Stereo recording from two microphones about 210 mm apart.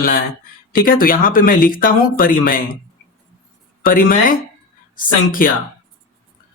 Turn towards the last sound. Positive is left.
turn(degrees=40)  # may be behind; listen again after turning